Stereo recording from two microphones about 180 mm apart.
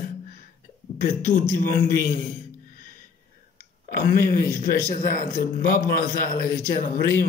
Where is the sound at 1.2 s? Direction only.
45° left (ahead or behind).